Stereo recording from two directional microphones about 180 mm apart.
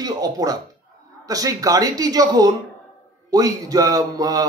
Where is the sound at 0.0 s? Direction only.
20° right (ahead or behind).